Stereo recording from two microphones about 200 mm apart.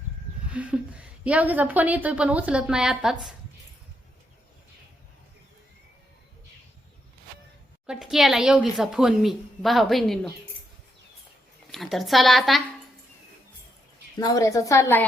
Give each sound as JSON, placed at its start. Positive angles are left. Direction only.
{"t": 0.5, "sound": "a woman's voice", "side_deg": -5}
{"t": 7.9, "sound": "a woman's voice", "side_deg": -5}
{"t": 11.7, "sound": "a woman's voice", "side_deg": 0}
{"t": 14.2, "sound": "a woman's voice", "side_deg": 20}